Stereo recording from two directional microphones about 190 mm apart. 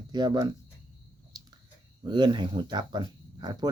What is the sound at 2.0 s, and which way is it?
Speech, 25° right (ahead or behind).